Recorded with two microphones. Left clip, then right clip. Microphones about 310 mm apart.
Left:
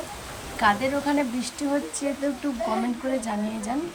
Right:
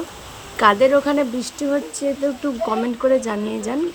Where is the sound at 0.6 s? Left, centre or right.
Centre.